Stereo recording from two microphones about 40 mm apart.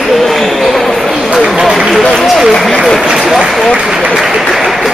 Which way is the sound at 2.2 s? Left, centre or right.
Centre.